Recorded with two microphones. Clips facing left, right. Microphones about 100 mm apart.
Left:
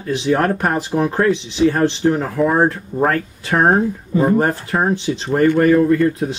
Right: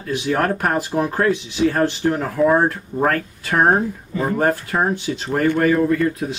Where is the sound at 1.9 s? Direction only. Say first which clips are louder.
Left 3 dB; 15° left (ahead or behind).